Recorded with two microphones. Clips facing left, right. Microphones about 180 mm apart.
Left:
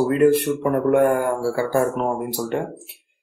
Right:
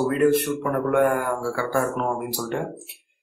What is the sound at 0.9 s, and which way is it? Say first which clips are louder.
Speech: left 1 dB; 30° left (ahead or behind).